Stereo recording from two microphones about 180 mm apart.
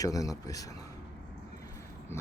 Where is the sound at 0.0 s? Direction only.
20° left (ahead or behind).